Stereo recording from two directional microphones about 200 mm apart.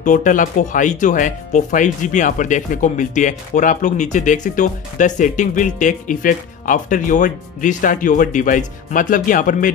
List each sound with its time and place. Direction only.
0.0 s speech: 40° left (ahead or behind)